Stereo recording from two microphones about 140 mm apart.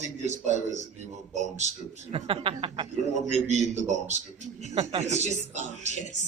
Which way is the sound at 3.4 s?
55° right (ahead or behind).